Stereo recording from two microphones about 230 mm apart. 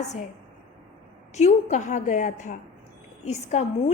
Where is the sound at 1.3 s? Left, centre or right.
Left.